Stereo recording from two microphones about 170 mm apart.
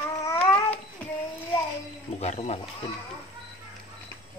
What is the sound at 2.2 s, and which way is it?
Speech, 40° left (ahead or behind).